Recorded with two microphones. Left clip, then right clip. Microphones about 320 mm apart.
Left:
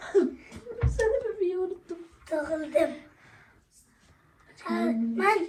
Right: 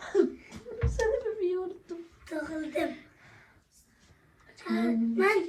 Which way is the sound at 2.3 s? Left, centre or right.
Centre.